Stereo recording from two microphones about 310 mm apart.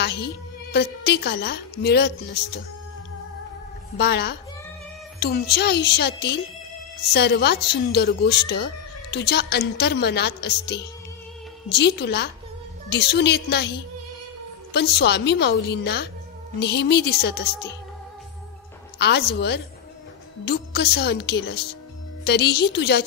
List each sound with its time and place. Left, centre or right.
0.0 s a woman's voice: left
4.0 s a woman's voice: left
18.9 s a woman's voice: left